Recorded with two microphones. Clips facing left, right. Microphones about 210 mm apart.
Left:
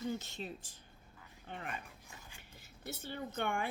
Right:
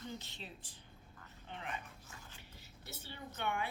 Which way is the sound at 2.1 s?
10° left (ahead or behind).